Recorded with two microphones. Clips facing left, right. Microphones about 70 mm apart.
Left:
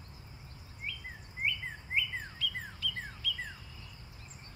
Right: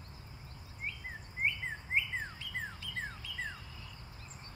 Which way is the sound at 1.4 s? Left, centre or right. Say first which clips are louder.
Even; right.